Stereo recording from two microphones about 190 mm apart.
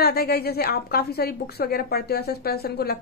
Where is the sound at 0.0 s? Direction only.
55° left (ahead or behind).